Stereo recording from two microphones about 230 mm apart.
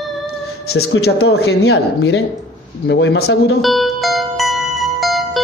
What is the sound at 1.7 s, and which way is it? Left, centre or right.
Speech, left.